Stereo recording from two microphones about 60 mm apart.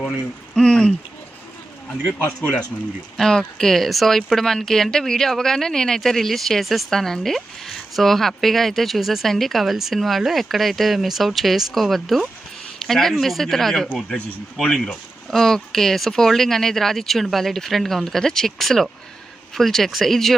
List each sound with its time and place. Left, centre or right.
0.5 s speech: centre
3.2 s speech: centre